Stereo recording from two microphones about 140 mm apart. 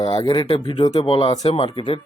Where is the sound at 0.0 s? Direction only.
30° left (ahead or behind).